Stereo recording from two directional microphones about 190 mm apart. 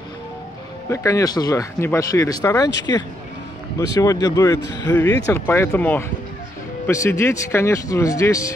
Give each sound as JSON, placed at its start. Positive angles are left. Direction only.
{"t": 0.8, "sound": "speech", "side_deg": 15}
{"t": 4.8, "sound": "speech", "side_deg": 10}